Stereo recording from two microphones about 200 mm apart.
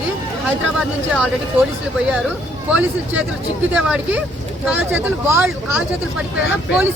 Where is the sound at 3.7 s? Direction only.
5° right (ahead or behind).